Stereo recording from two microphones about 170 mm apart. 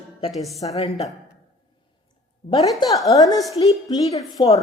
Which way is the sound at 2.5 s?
25° left (ahead or behind).